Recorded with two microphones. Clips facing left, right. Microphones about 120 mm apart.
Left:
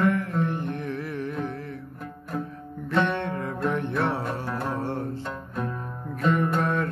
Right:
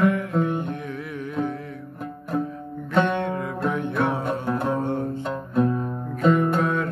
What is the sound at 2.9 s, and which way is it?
Music, 35° right (ahead or behind).